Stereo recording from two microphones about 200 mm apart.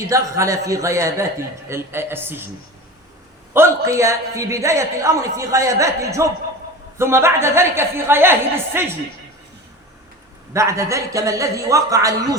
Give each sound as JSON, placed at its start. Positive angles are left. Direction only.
{"t": 0.1, "sound": "a man's voice", "side_deg": -15}
{"t": 3.5, "sound": "a man's voice", "side_deg": -15}
{"t": 10.5, "sound": "a man's voice", "side_deg": -15}